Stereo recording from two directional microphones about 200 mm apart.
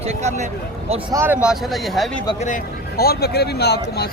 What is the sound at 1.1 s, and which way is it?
Speech, 15° right (ahead or behind).